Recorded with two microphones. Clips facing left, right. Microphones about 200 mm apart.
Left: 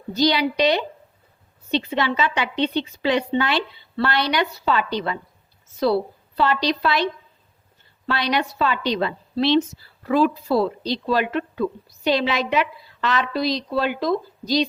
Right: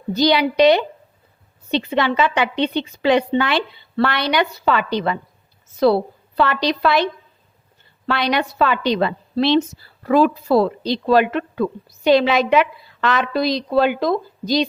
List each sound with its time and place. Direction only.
0.2 s speech: 60° right (ahead or behind)
1.9 s speech: 60° right (ahead or behind)
8.0 s speech: 60° right (ahead or behind)